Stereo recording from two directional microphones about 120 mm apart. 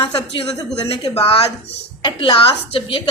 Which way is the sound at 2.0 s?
40° left (ahead or behind).